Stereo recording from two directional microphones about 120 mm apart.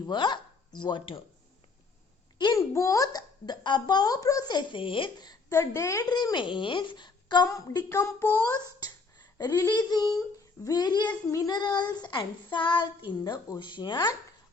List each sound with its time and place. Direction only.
0.0 s speech: 40° left (ahead or behind)
2.6 s speech: 25° left (ahead or behind)
7.9 s speech: 20° left (ahead or behind)
8.8 s speech: 35° left (ahead or behind)